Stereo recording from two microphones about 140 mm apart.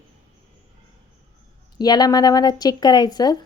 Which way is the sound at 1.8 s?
30° left (ahead or behind).